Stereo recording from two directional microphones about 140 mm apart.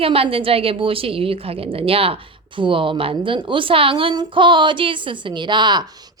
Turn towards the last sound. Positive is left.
turn(degrees=-30)  # may be behind; listen again after turning